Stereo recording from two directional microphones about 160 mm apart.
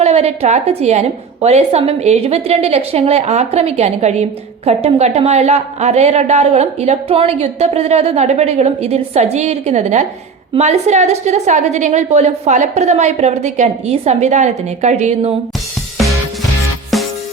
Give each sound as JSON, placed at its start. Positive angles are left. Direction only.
{"t": 0.0, "sound": "a woman's voice", "side_deg": -40}
{"t": 16.9, "sound": "music", "side_deg": 0}